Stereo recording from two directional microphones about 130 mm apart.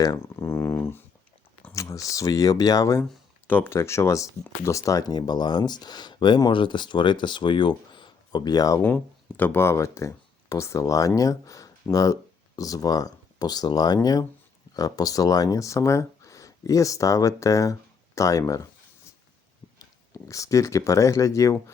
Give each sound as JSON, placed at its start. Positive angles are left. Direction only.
{"t": 0.0, "sound": "speech", "side_deg": 25}
{"t": 3.0, "sound": "speech", "side_deg": 15}
{"t": 9.4, "sound": "speech", "side_deg": 15}
{"t": 20.1, "sound": "speech", "side_deg": 25}